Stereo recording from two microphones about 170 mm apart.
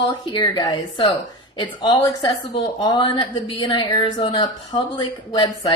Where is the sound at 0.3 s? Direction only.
25° left (ahead or behind).